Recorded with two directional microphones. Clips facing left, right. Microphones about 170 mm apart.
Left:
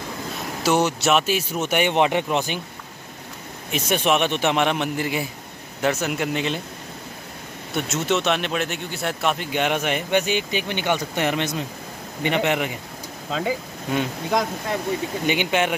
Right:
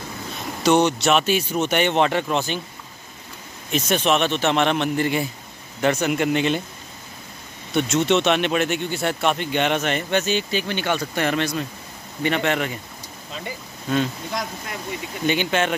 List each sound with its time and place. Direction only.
0.7 s speech: 5° left (ahead or behind)
3.7 s speech: 10° left (ahead or behind)
7.7 s speech: 5° left (ahead or behind)
13.3 s speech: 90° left
15.2 s speech: 15° left (ahead or behind)